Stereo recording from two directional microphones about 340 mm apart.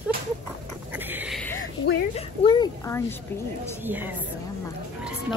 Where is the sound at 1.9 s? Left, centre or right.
Left.